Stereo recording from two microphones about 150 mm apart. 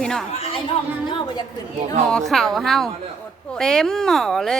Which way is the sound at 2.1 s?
5° left (ahead or behind).